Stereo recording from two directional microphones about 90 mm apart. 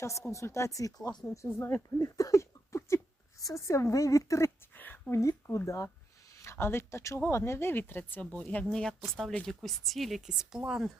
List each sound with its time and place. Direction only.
0.0 s speech: 35° left (ahead or behind)
2.0 s a sound: 40° left (ahead or behind)
3.4 s a woman's voice: 30° left (ahead or behind); by 10.9 s 5° right (ahead or behind)